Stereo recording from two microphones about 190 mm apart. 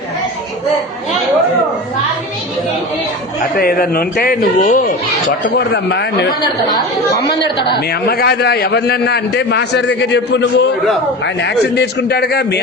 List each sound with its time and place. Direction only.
3.5 s speech: 50° left (ahead or behind)
5.5 s a man's voice: 60° left (ahead or behind)
7.3 s a man's voice: 60° left (ahead or behind)